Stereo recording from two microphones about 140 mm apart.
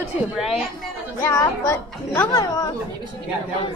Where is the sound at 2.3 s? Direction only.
25° left (ahead or behind).